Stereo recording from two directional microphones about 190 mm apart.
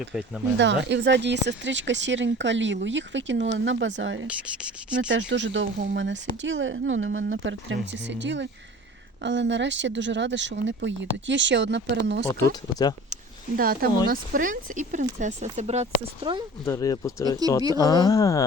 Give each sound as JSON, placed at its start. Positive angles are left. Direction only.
{"t": 0.1, "sound": "speech", "side_deg": 0}
{"t": 0.6, "sound": "speech", "side_deg": -70}
{"t": 4.3, "sound": "speech", "side_deg": -5}
{"t": 4.9, "sound": "speech", "side_deg": -70}
{"t": 6.4, "sound": "speech", "side_deg": -90}
{"t": 12.2, "sound": "speech", "side_deg": 15}
{"t": 13.6, "sound": "speech", "side_deg": -50}
{"t": 16.6, "sound": "speech", "side_deg": 20}